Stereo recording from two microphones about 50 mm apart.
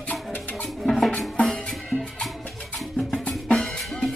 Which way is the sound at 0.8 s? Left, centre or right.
Centre.